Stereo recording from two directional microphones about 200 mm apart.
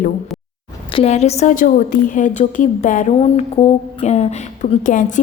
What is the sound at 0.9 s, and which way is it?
A woman's voice, 30° left (ahead or behind).